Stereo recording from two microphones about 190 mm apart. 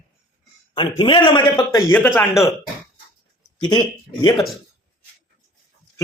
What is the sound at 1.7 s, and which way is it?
Speech, 15° left (ahead or behind).